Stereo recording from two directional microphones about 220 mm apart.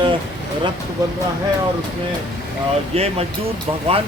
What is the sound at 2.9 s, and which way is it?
Speech, 25° right (ahead or behind).